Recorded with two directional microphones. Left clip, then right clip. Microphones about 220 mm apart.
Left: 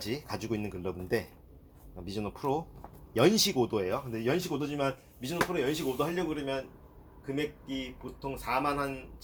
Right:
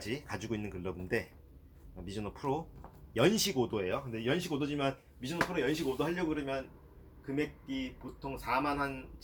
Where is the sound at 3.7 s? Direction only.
20° left (ahead or behind).